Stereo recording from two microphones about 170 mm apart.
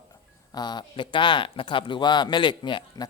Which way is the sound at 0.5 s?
25° left (ahead or behind).